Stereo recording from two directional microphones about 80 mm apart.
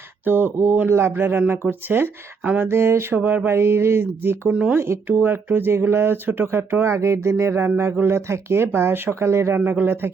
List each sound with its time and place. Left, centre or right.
0.3 s speech: right
2.6 s speech: right
4.4 s speech: centre
4.8 s speech: right
9.6 s speech: right